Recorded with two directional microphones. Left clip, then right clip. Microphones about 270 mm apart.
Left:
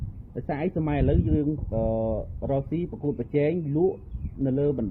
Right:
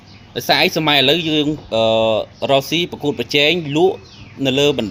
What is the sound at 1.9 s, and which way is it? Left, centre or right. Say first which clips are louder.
Speech: right 14 dB; right.